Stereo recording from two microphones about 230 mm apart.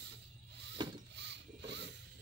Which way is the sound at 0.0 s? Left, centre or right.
Right.